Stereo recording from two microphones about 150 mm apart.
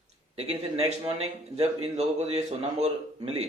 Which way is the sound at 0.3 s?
40° right (ahead or behind).